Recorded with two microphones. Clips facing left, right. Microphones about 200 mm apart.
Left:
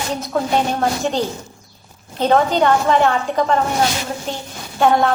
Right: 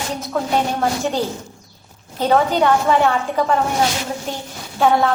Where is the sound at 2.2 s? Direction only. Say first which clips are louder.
Left 1 dB; 5° right (ahead or behind).